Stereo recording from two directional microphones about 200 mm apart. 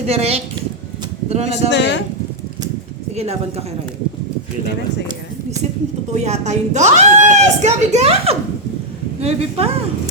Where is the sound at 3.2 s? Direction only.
30° right (ahead or behind).